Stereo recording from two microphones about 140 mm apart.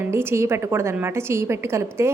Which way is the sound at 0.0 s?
15° right (ahead or behind).